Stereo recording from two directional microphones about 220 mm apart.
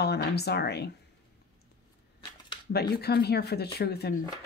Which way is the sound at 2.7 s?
45° left (ahead or behind).